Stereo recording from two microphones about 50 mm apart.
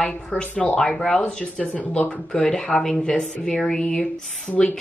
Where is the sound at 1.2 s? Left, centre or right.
Left.